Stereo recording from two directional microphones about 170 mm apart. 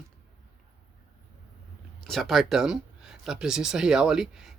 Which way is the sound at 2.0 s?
Centre (ahead or behind).